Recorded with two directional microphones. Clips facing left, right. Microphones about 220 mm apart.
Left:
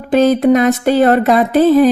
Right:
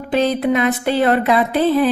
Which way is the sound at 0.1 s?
45° left (ahead or behind).